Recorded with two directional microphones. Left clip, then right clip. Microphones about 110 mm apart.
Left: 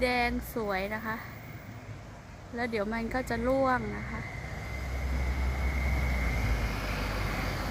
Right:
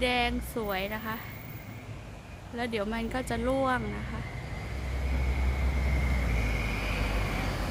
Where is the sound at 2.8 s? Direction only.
40° left (ahead or behind).